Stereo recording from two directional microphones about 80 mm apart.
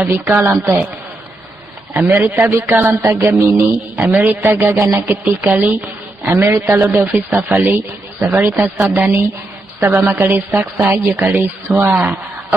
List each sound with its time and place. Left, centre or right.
0.2 s a woman's voice: right
2.0 s a woman's voice: right
2.9 s music: right
3.4 s a woman's voice: right
4.4 s music: right
5.2 s a woman's voice: centre
6.7 s music: right
7.2 s a woman's voice: right